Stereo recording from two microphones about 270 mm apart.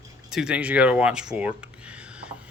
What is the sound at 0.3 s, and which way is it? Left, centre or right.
Speech, centre.